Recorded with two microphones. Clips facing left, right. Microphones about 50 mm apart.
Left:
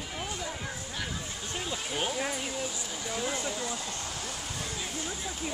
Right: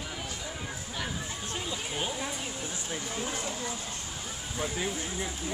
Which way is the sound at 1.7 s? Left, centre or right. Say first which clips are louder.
Left 2 dB; centre.